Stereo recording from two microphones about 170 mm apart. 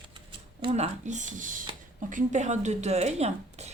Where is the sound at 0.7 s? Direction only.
45° right (ahead or behind).